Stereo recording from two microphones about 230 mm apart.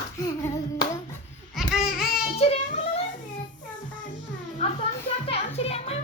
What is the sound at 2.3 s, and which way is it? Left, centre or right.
Child singing, left.